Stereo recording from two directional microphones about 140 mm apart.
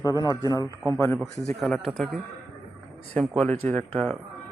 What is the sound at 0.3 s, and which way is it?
Speech, 25° left (ahead or behind).